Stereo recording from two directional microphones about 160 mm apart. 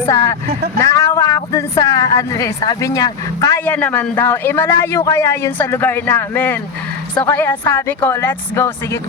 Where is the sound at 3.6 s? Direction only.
10° left (ahead or behind).